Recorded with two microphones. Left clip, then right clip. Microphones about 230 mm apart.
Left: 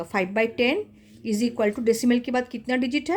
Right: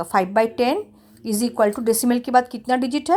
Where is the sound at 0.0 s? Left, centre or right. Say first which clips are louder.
Right 6 dB; centre.